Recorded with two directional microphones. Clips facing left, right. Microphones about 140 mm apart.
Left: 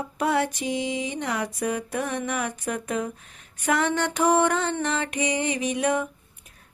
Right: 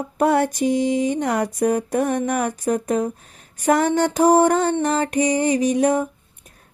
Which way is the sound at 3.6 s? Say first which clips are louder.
Right 6 dB; 40° right (ahead or behind).